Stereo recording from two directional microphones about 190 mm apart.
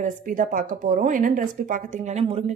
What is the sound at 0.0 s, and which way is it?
A woman's voice, 45° right (ahead or behind).